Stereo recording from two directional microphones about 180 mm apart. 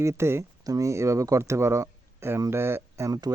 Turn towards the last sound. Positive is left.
turn(degrees=-20)  # may be behind; listen again after turning